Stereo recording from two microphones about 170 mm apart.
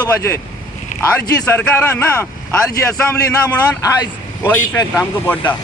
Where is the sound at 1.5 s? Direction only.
10° left (ahead or behind).